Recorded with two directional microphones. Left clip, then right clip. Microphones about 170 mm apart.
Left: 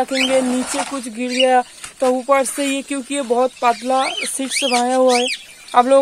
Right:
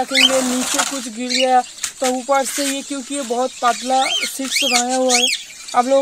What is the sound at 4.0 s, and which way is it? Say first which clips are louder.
Speech: right 2 dB; 10° left (ahead or behind).